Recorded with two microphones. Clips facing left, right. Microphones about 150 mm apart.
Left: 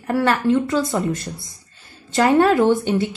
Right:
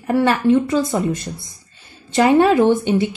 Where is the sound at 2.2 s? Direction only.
15° right (ahead or behind).